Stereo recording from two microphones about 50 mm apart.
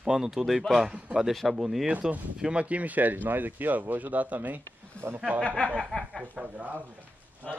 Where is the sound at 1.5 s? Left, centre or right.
Centre.